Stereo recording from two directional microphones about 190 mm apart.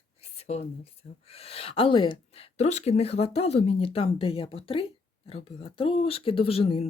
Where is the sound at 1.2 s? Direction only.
30° left (ahead or behind).